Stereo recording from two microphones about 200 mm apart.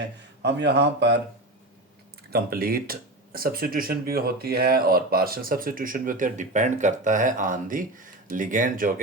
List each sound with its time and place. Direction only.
0.4 s speech: 60° right (ahead or behind)
2.3 s speech: 50° right (ahead or behind)